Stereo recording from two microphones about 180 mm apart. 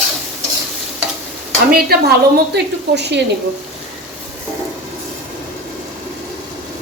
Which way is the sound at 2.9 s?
70° right (ahead or behind).